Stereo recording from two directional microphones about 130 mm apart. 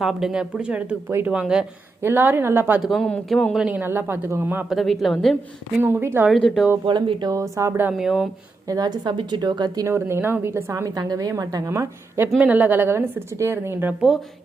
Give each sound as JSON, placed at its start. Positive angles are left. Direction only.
{"t": 0.0, "sound": "speech", "side_deg": -5}
{"t": 2.0, "sound": "speech", "side_deg": -15}
{"t": 2.8, "sound": "speech", "side_deg": 5}
{"t": 4.7, "sound": "speech", "side_deg": 0}
{"t": 5.8, "sound": "speech", "side_deg": -20}
{"t": 6.2, "sound": "speech", "side_deg": 0}
{"t": 6.8, "sound": "a woman's voice", "side_deg": -35}
{"t": 7.9, "sound": "speech", "side_deg": -5}
{"t": 8.6, "sound": "a woman's voice", "side_deg": -30}
{"t": 9.8, "sound": "a woman's voice", "side_deg": -20}